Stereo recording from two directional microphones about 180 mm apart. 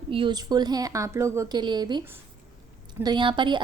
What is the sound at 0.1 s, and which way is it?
A woman's voice, 25° right (ahead or behind).